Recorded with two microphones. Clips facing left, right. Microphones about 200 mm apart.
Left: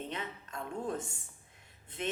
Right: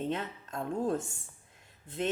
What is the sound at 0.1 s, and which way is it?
Speech, 40° right (ahead or behind).